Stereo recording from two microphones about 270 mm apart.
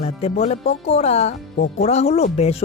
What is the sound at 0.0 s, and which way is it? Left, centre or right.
Speech, left.